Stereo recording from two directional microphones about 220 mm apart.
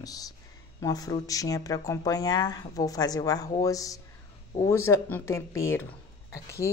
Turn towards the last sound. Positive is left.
turn(degrees=15)  # may be behind; listen again after turning